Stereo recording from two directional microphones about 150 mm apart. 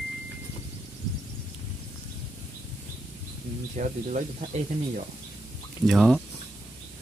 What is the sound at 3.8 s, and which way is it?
Speech, 55° right (ahead or behind).